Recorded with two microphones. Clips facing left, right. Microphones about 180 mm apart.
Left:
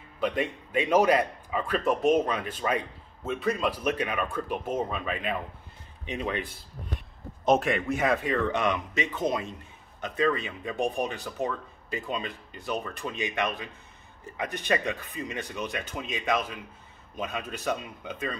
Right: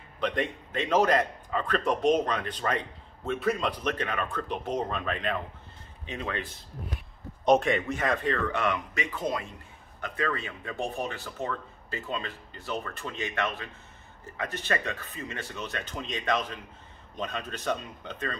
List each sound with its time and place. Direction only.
0.2 s a man's voice: 5° left (ahead or behind)
6.0 s a man's voice: 15° left (ahead or behind)
7.4 s a man's voice: centre (ahead or behind)
8.5 s a man's voice: 20° left (ahead or behind)